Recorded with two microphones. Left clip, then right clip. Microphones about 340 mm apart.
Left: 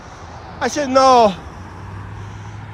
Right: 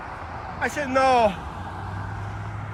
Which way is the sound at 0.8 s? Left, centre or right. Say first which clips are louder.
Left 8 dB; centre.